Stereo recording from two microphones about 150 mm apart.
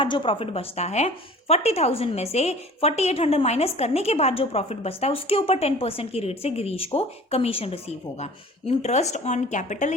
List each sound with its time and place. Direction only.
0.0 s a woman's voice: 35° left (ahead or behind); by 9.9 s 55° left (ahead or behind)